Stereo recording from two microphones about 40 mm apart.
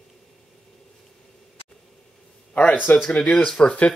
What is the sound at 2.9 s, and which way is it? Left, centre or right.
Speech, left.